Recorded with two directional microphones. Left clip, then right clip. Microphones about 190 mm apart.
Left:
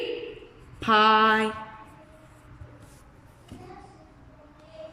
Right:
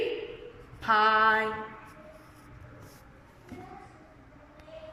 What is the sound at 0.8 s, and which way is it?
Female singing, 55° left (ahead or behind).